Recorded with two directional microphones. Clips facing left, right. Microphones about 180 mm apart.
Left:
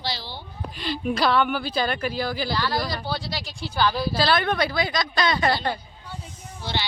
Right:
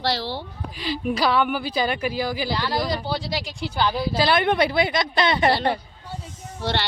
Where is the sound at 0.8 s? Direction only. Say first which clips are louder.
Right 1 dB; 10° right (ahead or behind); by 5.8 s 30° right (ahead or behind).